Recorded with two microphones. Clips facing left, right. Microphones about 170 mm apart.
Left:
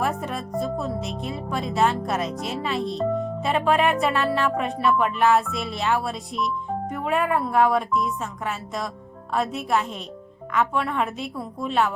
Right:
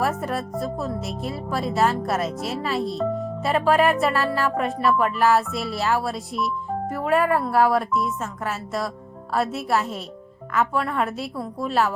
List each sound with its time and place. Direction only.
0.0 s speech: centre (ahead or behind)